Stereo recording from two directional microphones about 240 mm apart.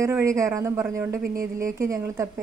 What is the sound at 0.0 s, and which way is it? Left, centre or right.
A woman's voice, centre.